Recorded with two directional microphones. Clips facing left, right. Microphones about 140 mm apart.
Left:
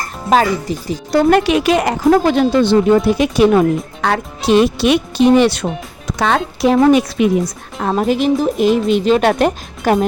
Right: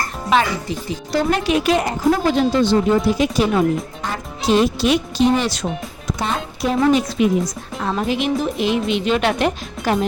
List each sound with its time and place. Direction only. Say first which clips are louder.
0.3 s speech: left 4 dB; 40° left (ahead or behind)
1.5 s speech: left 4 dB; 80° left
6.1 s a woman's voice: left 8 dB; 85° left
6.7 s speech: left 4 dB; 65° left (ahead or behind); by 10.1 s 50° left (ahead or behind)